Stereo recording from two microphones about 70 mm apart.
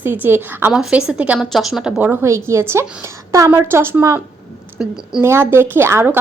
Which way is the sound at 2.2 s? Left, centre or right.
Right.